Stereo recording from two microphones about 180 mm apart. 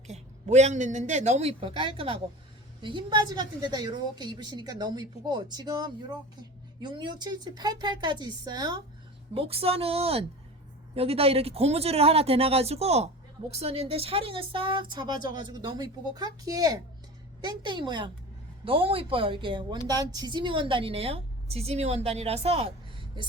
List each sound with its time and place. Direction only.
0.1 s a woman's voice: 40° right (ahead or behind)